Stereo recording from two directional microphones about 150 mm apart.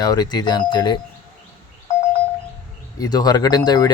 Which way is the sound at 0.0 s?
25° left (ahead or behind).